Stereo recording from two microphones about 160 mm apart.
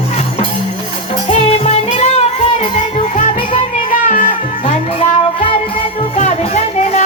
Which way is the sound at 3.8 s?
55° left (ahead or behind).